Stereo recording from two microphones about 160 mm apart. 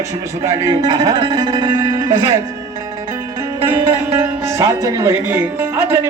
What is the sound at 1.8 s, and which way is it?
Speech, 20° right (ahead or behind).